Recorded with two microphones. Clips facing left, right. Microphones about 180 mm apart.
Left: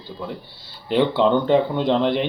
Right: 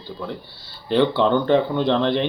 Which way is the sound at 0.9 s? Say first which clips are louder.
Even; 15° left (ahead or behind).